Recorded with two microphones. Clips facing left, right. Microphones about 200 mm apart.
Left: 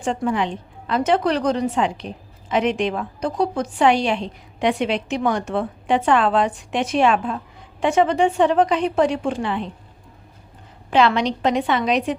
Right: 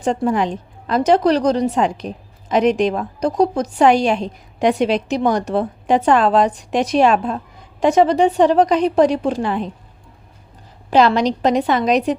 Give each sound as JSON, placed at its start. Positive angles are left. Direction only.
{"t": 0.0, "sound": "a woman's voice", "side_deg": -40}
{"t": 10.9, "sound": "a woman's voice", "side_deg": -40}